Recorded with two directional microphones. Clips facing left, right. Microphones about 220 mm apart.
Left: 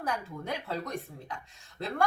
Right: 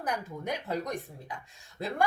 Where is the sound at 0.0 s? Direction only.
15° right (ahead or behind).